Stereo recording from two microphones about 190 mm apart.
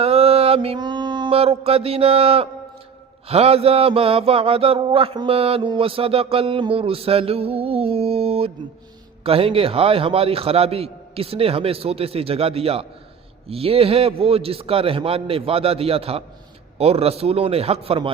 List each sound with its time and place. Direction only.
0.0 s mantra: 30° right (ahead or behind)
3.2 s a sound: 30° right (ahead or behind)
9.2 s a man's voice: 30° right (ahead or behind)